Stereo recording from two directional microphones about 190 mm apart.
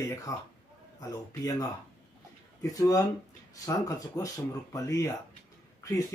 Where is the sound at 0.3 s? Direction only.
20° left (ahead or behind).